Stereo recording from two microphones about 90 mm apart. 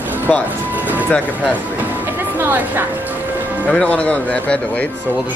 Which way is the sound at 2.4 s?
20° right (ahead or behind).